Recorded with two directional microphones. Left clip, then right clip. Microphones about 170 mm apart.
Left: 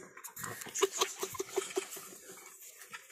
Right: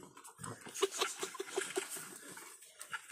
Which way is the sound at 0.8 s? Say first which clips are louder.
Left 3 dB; 15° left (ahead or behind).